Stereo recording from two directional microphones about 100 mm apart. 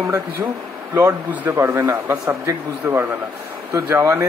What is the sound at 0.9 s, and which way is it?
Speech, 20° right (ahead or behind).